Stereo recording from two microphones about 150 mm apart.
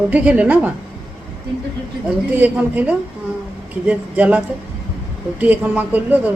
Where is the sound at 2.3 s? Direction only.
10° right (ahead or behind).